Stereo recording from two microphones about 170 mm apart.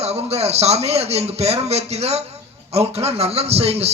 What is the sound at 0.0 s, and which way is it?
A man's voice, 35° right (ahead or behind).